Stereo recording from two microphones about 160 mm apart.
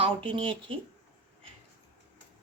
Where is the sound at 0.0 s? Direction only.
35° right (ahead or behind).